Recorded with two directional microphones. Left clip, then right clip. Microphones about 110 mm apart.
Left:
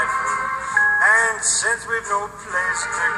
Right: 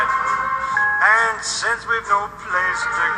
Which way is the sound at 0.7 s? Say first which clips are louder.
Left 1 dB; 40° left (ahead or behind).